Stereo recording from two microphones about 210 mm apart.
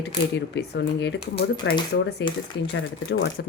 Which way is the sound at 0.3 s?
55° left (ahead or behind).